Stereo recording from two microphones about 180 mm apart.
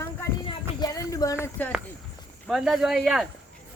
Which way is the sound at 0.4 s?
20° left (ahead or behind).